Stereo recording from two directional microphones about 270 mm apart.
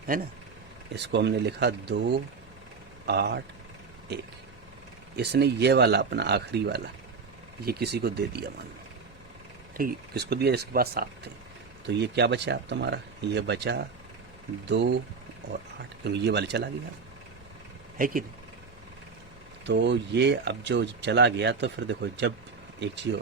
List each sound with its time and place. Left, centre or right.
0.9 s speech: right
5.1 s speech: right
9.7 s speech: right
16.0 s speech: right
17.9 s speech: right
19.6 s speech: right